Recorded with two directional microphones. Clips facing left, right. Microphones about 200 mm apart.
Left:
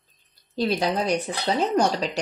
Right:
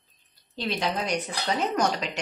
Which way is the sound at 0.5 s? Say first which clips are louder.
Left 5 dB; 35° left (ahead or behind).